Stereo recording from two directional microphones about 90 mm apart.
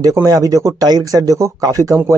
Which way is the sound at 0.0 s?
40° right (ahead or behind).